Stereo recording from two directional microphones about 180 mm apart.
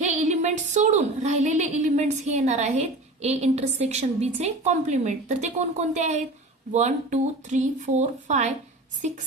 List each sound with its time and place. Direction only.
0.0 s a woman's voice: 40° right (ahead or behind)